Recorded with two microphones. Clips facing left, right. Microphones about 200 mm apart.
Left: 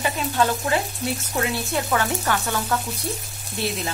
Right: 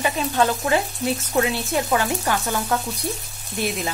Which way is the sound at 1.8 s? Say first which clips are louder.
Even; 20° right (ahead or behind).